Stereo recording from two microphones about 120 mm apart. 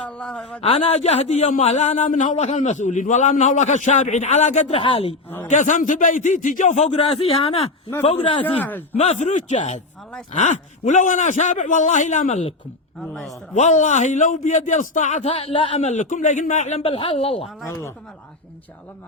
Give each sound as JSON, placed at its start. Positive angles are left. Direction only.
{"t": 0.2, "sound": "a man's voice", "side_deg": 10}
{"t": 0.6, "sound": "a man's voice", "side_deg": 60}
{"t": 4.8, "sound": "speech", "side_deg": 50}
{"t": 5.5, "sound": "a man's voice", "side_deg": 90}
{"t": 8.4, "sound": "a man's voice", "side_deg": 15}
{"t": 9.0, "sound": "a man's voice", "side_deg": 75}
{"t": 10.3, "sound": "a man's voice", "side_deg": 90}
{"t": 13.6, "sound": "a man's voice", "side_deg": 80}
{"t": 15.8, "sound": "a man's voice", "side_deg": 75}
{"t": 16.8, "sound": "speech", "side_deg": 50}
{"t": 17.7, "sound": "speech", "side_deg": 25}